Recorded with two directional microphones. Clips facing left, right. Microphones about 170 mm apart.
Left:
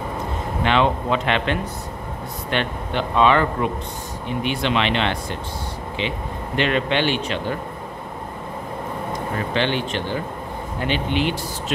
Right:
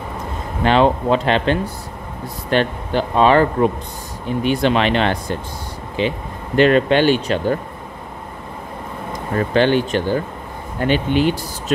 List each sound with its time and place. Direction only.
0.7 s speech: 35° right (ahead or behind)
9.5 s speech: 45° right (ahead or behind)